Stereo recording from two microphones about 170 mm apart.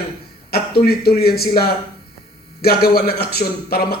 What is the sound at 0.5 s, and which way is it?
A man's voice, 65° left (ahead or behind).